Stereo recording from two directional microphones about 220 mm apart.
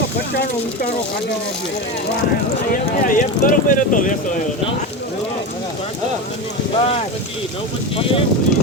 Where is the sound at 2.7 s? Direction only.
35° left (ahead or behind).